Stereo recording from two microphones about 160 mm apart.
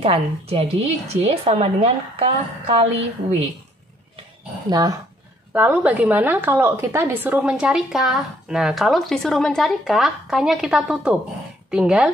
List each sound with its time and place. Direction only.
0.0 s a woman's voice: 40° right (ahead or behind)
4.6 s speech: 25° right (ahead or behind)
5.5 s a woman's voice: 10° right (ahead or behind)